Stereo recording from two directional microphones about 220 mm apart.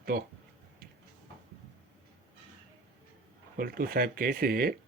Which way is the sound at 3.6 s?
40° right (ahead or behind).